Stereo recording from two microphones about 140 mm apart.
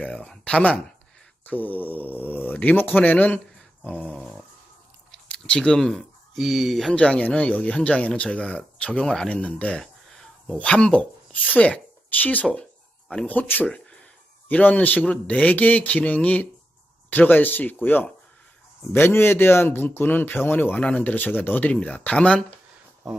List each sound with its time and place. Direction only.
0.0 s a man's voice: 10° left (ahead or behind)
3.8 s a sound: 5° left (ahead or behind)
5.3 s a man's voice: 5° left (ahead or behind)